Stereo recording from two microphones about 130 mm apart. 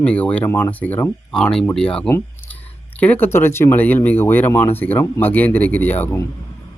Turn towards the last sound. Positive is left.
turn(degrees=15)  # may be behind; listen again after turning